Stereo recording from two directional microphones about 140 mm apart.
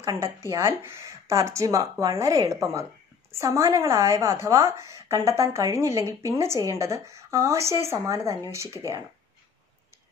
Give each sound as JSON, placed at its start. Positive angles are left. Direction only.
{"t": 0.0, "sound": "speech", "side_deg": -20}